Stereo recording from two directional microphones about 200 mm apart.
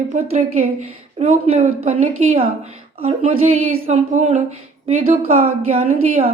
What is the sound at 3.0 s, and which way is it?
Speech, 30° right (ahead or behind).